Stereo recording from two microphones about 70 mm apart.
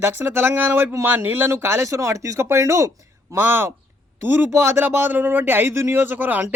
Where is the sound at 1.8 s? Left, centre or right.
Right.